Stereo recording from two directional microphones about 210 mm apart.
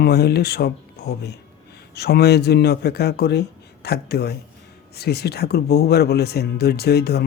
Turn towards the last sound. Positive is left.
turn(degrees=50)  # may be behind; listen again after turning